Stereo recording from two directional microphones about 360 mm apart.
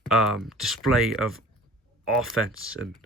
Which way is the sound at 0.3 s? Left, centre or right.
Centre.